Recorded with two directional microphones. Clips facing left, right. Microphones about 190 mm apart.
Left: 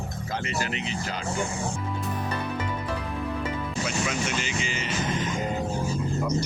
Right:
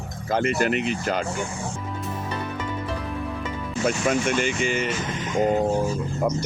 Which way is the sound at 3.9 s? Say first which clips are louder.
Right 9 dB; 50° right (ahead or behind).